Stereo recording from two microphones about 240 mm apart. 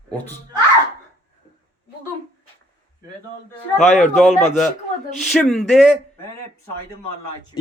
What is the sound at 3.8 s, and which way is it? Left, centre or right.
Speech, left.